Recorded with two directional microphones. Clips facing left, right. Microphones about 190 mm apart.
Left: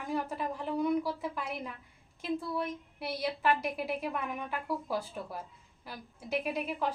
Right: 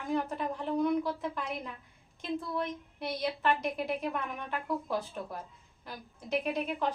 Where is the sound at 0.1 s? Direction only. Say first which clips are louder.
Right 2 dB; 5° left (ahead or behind).